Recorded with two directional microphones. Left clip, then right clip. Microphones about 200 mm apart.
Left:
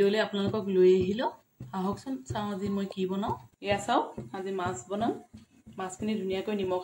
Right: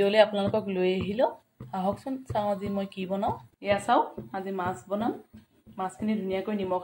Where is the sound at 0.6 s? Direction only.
50° left (ahead or behind).